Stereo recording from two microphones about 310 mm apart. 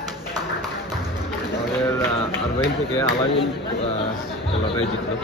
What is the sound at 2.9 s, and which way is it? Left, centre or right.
Speech, centre.